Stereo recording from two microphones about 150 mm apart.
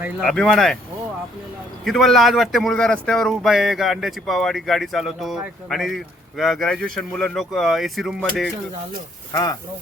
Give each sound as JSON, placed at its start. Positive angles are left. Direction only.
{"t": 0.3, "sound": "speech", "side_deg": 5}
{"t": 1.8, "sound": "speech", "side_deg": 0}
{"t": 9.3, "sound": "speech", "side_deg": 25}